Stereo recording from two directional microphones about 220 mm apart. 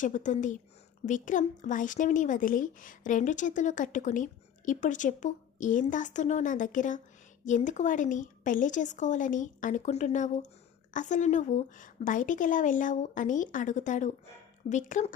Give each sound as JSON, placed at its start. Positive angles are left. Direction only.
{"t": 0.0, "sound": "speech", "side_deg": 35}